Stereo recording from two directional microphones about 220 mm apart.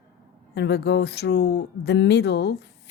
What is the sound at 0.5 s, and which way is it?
Speech, 50° left (ahead or behind).